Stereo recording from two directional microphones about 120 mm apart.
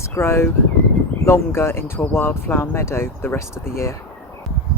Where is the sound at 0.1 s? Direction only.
20° left (ahead or behind).